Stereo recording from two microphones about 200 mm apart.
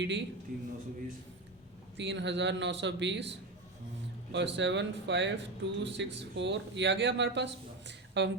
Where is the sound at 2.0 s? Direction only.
60° right (ahead or behind).